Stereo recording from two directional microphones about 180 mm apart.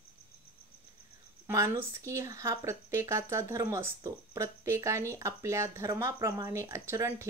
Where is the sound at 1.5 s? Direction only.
15° right (ahead or behind).